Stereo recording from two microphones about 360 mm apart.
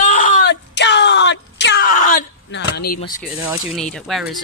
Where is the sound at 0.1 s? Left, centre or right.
Left.